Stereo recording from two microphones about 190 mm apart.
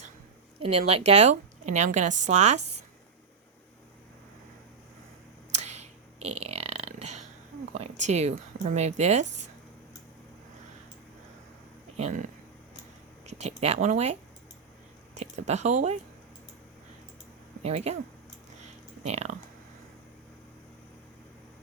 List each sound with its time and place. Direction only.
0.6 s a woman's voice: 30° right (ahead or behind)
5.5 s a sound: 35° right (ahead or behind)
7.7 s a woman's voice: 35° right (ahead or behind)
11.9 s a woman's voice: 40° right (ahead or behind)
17.6 s a woman's voice: 35° right (ahead or behind)
19.0 s a woman's voice: 35° right (ahead or behind)